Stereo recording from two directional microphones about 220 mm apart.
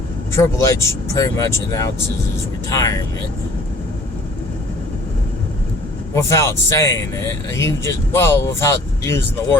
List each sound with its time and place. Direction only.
0.3 s speech: 15° left (ahead or behind)
6.1 s speech: 15° left (ahead or behind)